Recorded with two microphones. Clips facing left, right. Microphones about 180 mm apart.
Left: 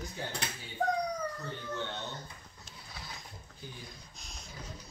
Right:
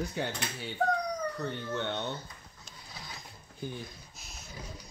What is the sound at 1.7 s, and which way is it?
Speech, 65° right (ahead or behind).